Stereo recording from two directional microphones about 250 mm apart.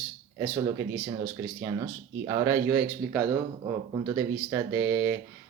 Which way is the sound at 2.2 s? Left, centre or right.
Centre.